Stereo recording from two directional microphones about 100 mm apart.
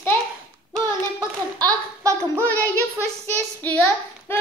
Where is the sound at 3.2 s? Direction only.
15° left (ahead or behind).